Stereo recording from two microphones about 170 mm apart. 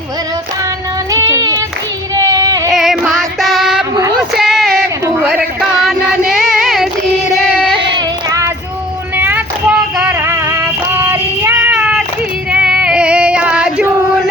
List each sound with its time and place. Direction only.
1.1 s child singing: 20° right (ahead or behind)
2.6 s female singing: centre (ahead or behind)
4.2 s a sound: centre (ahead or behind)
5.8 s a sound: centre (ahead or behind)
7.9 s child singing: 20° right (ahead or behind)
12.5 s female singing: 5° right (ahead or behind)